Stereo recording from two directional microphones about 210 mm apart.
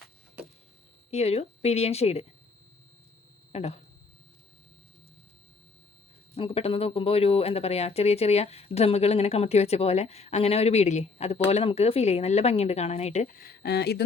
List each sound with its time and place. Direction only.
1.1 s speech: 30° left (ahead or behind)
3.5 s speech: 30° left (ahead or behind)
6.3 s speech: 25° left (ahead or behind); by 14.0 s 50° left (ahead or behind)